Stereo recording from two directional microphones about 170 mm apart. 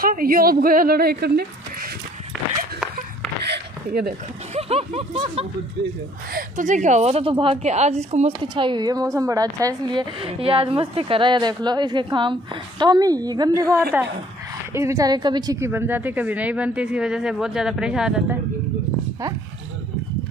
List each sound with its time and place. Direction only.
0.0 s a woman's voice: 55° right (ahead or behind)
3.4 s a sound: 75° right (ahead or behind)
4.6 s speech: 35° right (ahead or behind)
6.3 s a woman's voice: 50° right (ahead or behind); by 18.4 s 5° right (ahead or behind)